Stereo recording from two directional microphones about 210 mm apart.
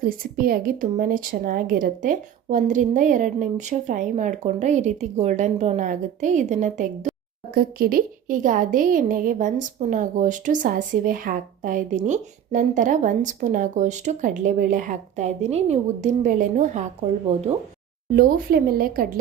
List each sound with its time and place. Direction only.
0.0 s a woman's voice: 45° right (ahead or behind)
18.1 s speech: 45° right (ahead or behind)